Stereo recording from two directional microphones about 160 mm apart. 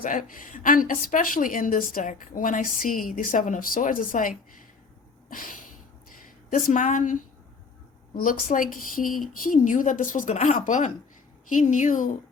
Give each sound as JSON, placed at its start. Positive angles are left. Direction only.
{"t": 0.0, "sound": "a woman's voice", "side_deg": 55}